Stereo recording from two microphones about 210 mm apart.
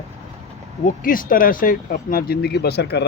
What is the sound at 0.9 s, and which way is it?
Speech, 40° left (ahead or behind).